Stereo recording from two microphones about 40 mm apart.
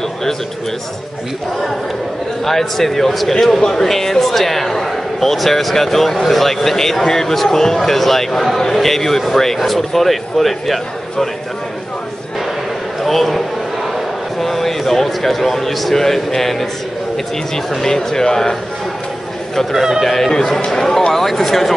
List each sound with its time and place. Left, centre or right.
2.4 s speech: centre
13.0 s a man's voice: centre
17.8 s speech: centre